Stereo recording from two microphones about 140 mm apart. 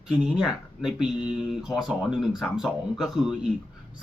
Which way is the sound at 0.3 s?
5° right (ahead or behind).